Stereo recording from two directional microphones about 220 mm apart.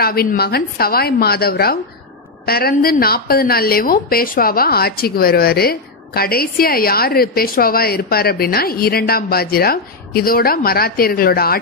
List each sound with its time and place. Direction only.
0.0 s a woman's voice: 45° left (ahead or behind)